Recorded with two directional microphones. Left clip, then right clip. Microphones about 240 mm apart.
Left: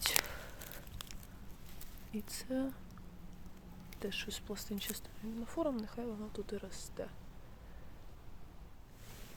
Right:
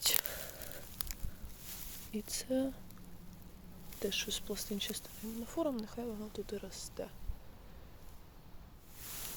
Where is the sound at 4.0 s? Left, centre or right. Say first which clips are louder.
Right 5 dB; centre.